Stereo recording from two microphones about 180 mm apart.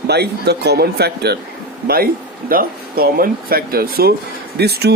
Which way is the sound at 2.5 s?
55° right (ahead or behind).